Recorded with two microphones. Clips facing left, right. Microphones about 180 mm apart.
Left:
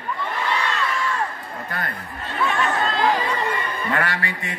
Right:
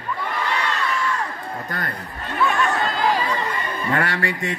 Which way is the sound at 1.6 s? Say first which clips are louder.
Left 2 dB; 40° right (ahead or behind).